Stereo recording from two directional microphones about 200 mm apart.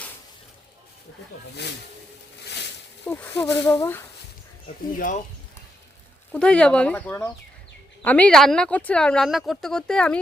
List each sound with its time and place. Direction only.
1.6 s speech: 55° left (ahead or behind)
2.4 s a sound: 55° left (ahead or behind)
3.1 s speech: 10° left (ahead or behind)
4.9 s speech: 40° left (ahead or behind)
6.3 s speech: 5° left (ahead or behind)